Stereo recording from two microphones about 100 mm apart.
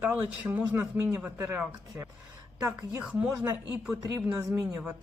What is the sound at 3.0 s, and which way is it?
Speech, 15° right (ahead or behind).